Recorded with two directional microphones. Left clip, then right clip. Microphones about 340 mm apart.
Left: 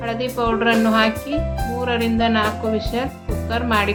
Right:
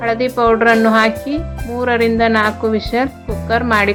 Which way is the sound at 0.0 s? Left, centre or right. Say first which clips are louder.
Right 7 dB; right.